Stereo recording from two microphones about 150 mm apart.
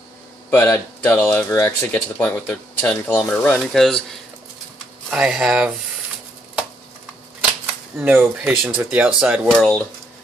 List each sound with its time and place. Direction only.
0.5 s speech: 15° left (ahead or behind)
5.1 s speech: 5° right (ahead or behind)
8.0 s speech: 10° right (ahead or behind)
9.6 s speech: 5° left (ahead or behind)